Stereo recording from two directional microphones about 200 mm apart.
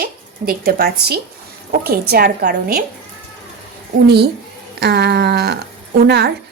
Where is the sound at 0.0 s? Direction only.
45° right (ahead or behind).